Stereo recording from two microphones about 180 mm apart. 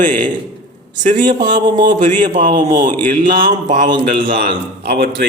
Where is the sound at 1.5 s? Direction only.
25° right (ahead or behind).